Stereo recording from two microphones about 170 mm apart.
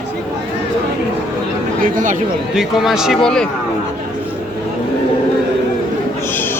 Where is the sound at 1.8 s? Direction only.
50° right (ahead or behind).